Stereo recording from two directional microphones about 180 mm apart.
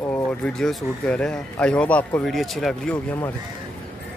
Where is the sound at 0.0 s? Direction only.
5° left (ahead or behind).